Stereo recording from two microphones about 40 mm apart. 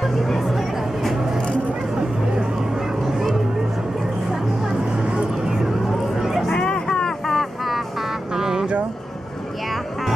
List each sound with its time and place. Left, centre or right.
0.2 s a sound: centre
3.1 s music: centre
6.1 s a sound: centre
6.5 s vehicle: centre
7.2 s vehicle: centre
8.4 s vehicle: centre